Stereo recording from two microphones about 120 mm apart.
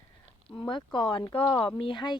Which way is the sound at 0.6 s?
40° left (ahead or behind).